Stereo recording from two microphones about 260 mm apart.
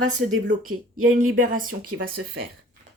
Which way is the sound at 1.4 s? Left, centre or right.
Right.